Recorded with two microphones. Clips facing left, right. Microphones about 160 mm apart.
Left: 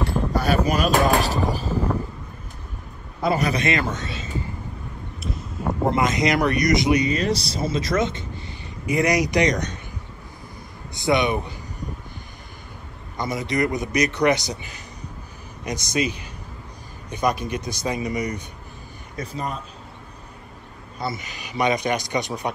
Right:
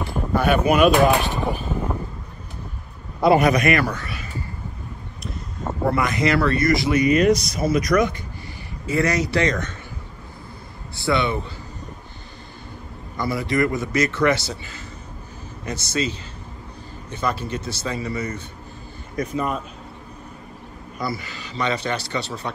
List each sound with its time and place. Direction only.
0.3 s speech: 35° left (ahead or behind)
1.7 s vehicle: centre (ahead or behind)
3.3 s a man's voice: 30° left (ahead or behind)
5.2 s a sound: centre (ahead or behind)
5.9 s a man's voice: 20° left (ahead or behind)
7.1 s speech: 30° left (ahead or behind)
11.0 s speech: 20° left (ahead or behind)
13.2 s a man's voice: 20° left (ahead or behind)
21.0 s a man's voice: 20° left (ahead or behind)